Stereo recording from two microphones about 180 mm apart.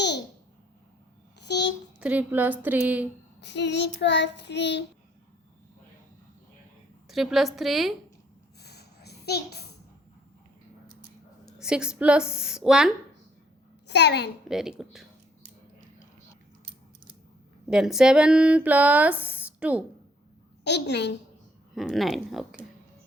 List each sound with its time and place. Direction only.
1.4 s a sound: 70° left (ahead or behind)
2.0 s speech: 10° right (ahead or behind)
3.4 s child singing: 75° left (ahead or behind)
7.1 s a woman's voice: centre (ahead or behind)
8.6 s a sound: 65° left (ahead or behind)
11.4 s a woman's voice: 5° right (ahead or behind)
13.8 s child singing: 70° left (ahead or behind)
14.4 s a woman's voice: centre (ahead or behind)
17.7 s speech: 5° right (ahead or behind)
20.7 s child singing: 70° left (ahead or behind)
21.8 s a woman's voice: centre (ahead or behind)